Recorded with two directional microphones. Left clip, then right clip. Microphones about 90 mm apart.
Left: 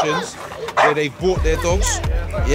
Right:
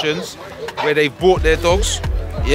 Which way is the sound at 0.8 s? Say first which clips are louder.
Right 7 dB; 20° right (ahead or behind).